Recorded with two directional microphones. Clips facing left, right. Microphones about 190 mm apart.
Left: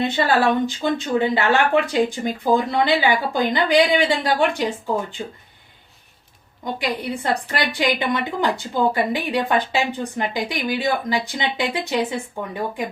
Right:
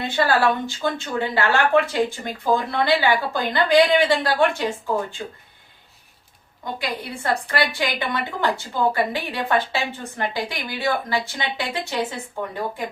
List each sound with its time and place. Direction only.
0.0 s a woman's voice: 20° left (ahead or behind)
6.7 s a woman's voice: 20° left (ahead or behind)